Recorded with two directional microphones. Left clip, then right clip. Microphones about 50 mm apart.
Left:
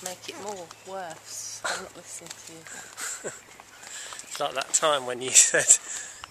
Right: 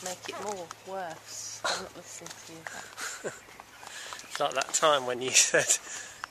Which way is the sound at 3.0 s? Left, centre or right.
Centre.